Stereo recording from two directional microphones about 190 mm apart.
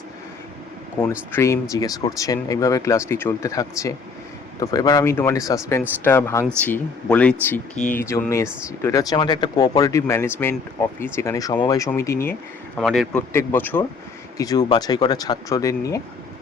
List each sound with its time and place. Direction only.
1.3 s speech: 15° left (ahead or behind)
12.8 s a man's voice: centre (ahead or behind)
13.1 s speech: 10° left (ahead or behind)